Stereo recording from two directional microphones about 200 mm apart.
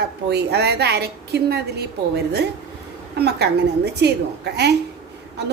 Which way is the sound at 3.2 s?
55° right (ahead or behind).